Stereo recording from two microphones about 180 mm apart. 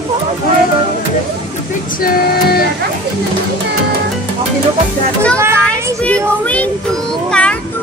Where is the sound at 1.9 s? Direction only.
55° left (ahead or behind).